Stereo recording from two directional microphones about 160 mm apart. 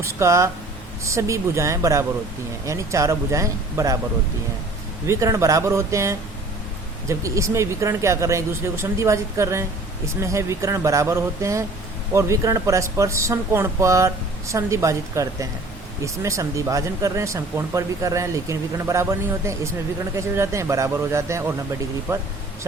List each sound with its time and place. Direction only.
0.0 s a man's voice: 20° right (ahead or behind)
5.0 s speech: 20° right (ahead or behind)
20.1 s a man's voice: 15° right (ahead or behind)